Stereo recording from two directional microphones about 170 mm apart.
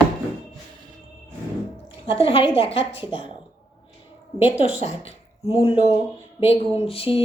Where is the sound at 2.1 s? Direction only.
30° left (ahead or behind).